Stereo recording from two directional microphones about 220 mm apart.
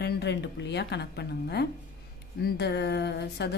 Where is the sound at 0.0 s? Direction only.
50° left (ahead or behind).